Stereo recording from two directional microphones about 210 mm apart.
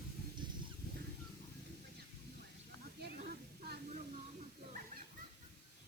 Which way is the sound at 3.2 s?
45° right (ahead or behind).